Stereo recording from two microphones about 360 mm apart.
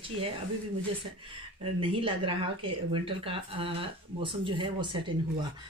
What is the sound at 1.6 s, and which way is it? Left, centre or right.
Speech, centre.